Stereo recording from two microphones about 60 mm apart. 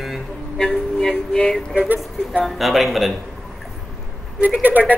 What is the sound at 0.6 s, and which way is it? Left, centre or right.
Music, centre.